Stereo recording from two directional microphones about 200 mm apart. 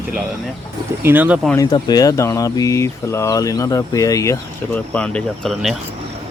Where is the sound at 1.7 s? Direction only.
20° left (ahead or behind); by 5.7 s centre (ahead or behind).